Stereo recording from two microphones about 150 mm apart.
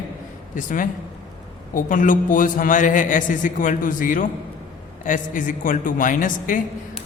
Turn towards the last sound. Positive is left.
turn(degrees=65)  # may be behind; listen again after turning